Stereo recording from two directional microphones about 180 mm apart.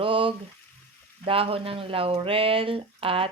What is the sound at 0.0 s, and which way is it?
Frying, 30° right (ahead or behind).